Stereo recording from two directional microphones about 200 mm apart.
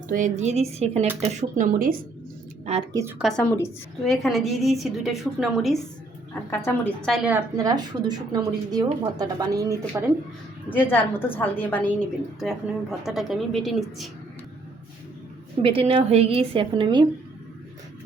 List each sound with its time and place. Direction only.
0.1 s speech: 35° right (ahead or behind)
2.9 s speech: 10° right (ahead or behind)
3.2 s a woman's voice: 5° left (ahead or behind)
7.3 s speech: 15° right (ahead or behind)
10.7 s a woman's voice: 10° left (ahead or behind)
15.6 s speech: 30° right (ahead or behind)